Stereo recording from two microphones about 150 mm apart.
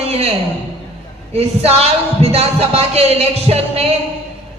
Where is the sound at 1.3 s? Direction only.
45° right (ahead or behind).